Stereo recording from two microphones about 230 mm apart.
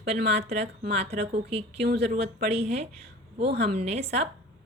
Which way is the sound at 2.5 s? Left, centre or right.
Right.